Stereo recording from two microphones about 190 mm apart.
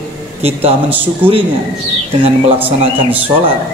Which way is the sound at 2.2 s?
30° right (ahead or behind).